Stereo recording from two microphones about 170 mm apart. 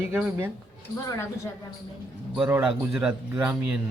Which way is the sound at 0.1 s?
10° right (ahead or behind).